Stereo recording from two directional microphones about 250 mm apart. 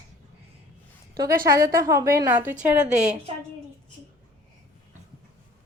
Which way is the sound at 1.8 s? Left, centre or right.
Centre.